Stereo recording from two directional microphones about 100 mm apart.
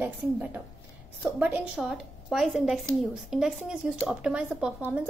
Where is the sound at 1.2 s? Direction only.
15° right (ahead or behind).